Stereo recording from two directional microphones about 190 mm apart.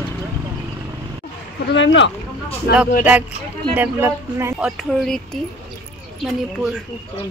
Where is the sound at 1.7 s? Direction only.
70° left (ahead or behind).